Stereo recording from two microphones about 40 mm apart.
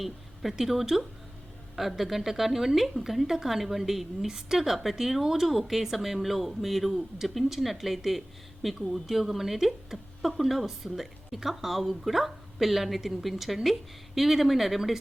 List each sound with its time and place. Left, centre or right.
0.5 s speech: centre